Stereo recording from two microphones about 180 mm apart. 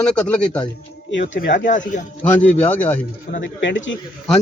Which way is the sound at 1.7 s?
45° left (ahead or behind).